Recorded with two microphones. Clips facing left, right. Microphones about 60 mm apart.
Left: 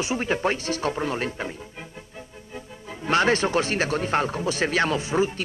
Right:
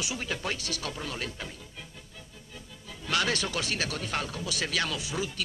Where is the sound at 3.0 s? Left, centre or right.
Left.